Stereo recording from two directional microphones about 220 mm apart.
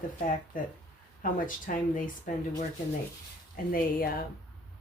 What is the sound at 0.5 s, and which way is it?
Speech, 40° left (ahead or behind).